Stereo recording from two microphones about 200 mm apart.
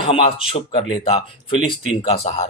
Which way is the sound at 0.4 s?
25° left (ahead or behind).